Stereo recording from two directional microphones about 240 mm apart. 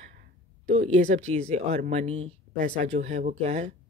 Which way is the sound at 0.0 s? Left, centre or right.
Right.